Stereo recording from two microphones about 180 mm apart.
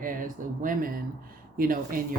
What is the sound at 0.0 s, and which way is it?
Speech, 50° right (ahead or behind).